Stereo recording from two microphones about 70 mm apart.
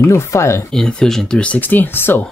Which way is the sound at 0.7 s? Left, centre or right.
Centre.